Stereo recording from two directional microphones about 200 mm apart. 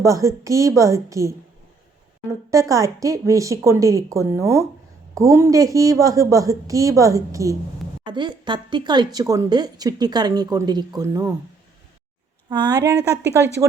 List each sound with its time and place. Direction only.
0.0 s a woman's voice: 15° right (ahead or behind)
2.5 s a woman's voice: 15° right (ahead or behind)
12.5 s a woman's voice: 20° right (ahead or behind)